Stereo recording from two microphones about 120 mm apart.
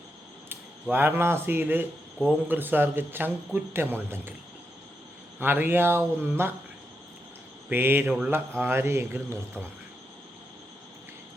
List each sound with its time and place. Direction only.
0.4 s a man's voice: 15° right (ahead or behind)
5.4 s a man's voice: 15° right (ahead or behind)
7.7 s a man's voice: 20° right (ahead or behind)